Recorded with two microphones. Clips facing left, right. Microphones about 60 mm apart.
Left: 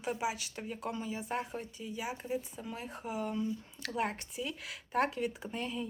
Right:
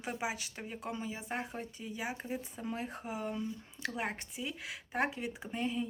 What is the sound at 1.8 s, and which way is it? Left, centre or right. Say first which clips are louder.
Speech: even; right.